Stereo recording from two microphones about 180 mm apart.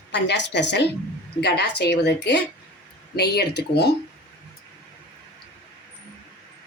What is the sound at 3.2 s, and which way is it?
Speech, 65° left (ahead or behind).